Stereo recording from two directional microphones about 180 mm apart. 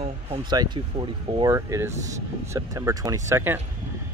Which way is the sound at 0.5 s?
25° right (ahead or behind).